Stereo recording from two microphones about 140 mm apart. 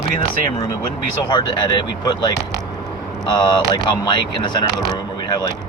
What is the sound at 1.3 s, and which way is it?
Speech, 30° left (ahead or behind).